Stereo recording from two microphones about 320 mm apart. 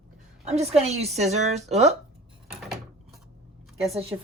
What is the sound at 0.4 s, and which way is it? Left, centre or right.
A woman's voice, centre.